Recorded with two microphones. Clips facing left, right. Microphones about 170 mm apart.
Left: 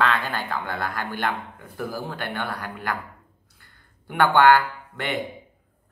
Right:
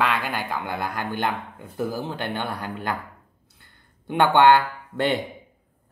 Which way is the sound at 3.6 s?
20° right (ahead or behind).